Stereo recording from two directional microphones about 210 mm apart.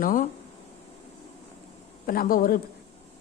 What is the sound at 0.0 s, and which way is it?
Speech, 40° left (ahead or behind).